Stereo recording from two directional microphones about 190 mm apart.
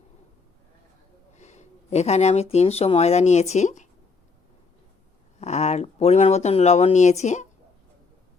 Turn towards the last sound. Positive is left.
turn(degrees=40)  # may be behind; listen again after turning